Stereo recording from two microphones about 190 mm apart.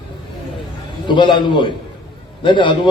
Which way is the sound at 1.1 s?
25° left (ahead or behind).